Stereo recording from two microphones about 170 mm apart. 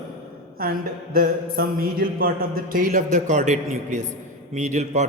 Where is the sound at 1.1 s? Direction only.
60° right (ahead or behind).